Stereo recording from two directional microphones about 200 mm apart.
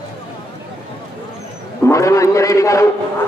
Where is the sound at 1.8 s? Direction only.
15° left (ahead or behind).